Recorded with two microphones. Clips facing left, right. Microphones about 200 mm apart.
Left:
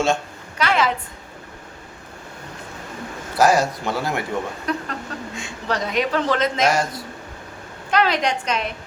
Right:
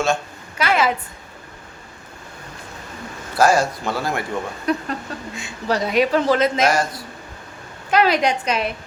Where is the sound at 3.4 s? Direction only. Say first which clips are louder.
Even; 15° left (ahead or behind).